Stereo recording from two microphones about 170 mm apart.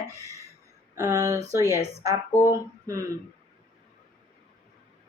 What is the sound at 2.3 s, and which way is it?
Speech, 15° left (ahead or behind).